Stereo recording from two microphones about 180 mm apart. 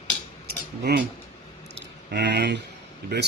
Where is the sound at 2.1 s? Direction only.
70° right (ahead or behind).